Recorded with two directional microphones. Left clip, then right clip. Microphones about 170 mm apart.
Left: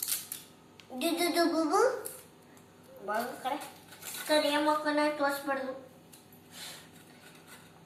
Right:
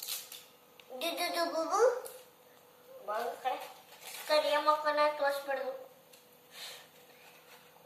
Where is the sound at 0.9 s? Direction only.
15° right (ahead or behind).